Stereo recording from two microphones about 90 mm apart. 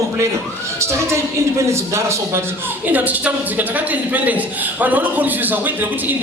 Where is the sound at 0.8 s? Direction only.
30° right (ahead or behind).